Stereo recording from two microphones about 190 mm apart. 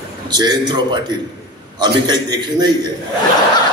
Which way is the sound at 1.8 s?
20° right (ahead or behind).